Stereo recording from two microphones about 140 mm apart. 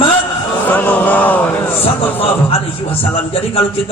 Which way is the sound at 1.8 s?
40° left (ahead or behind).